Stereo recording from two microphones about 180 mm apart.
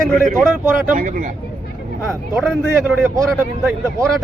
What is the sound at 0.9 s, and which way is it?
Speech, 50° right (ahead or behind).